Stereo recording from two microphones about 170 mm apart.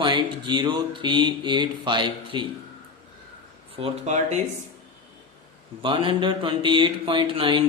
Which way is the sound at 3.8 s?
40° right (ahead or behind).